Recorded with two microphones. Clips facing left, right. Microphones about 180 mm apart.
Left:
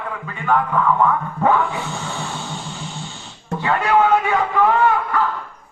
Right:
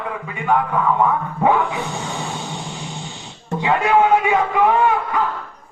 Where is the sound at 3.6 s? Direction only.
15° right (ahead or behind).